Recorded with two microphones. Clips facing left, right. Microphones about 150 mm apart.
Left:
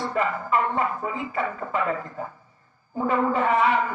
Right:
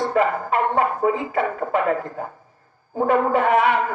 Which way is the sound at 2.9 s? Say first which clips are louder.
Right 4 dB; 60° right (ahead or behind).